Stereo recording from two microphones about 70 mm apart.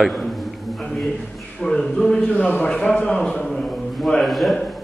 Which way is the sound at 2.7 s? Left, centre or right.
Centre.